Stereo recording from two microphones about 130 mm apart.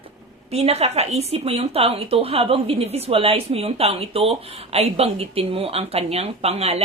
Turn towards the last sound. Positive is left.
turn(degrees=-50)  # may be behind; listen again after turning